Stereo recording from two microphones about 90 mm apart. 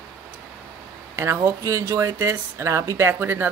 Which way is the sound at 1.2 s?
30° right (ahead or behind).